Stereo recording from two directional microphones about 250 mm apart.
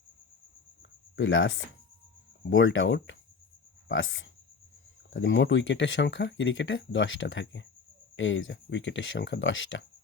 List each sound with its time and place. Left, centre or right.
1.1 s speech: left